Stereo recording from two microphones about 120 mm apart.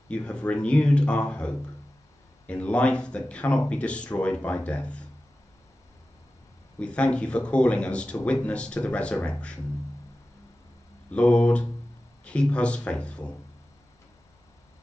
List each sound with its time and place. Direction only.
0.1 s speech: 10° left (ahead or behind)
6.8 s speech: 10° left (ahead or behind)
11.1 s speech: 10° left (ahead or behind)